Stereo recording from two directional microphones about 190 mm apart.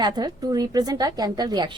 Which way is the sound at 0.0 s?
20° right (ahead or behind).